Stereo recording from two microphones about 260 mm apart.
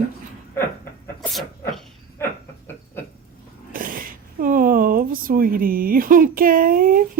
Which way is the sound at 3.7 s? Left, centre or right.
Right.